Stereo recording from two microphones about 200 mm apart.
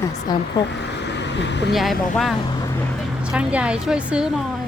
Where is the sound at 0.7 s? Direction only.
60° left (ahead or behind).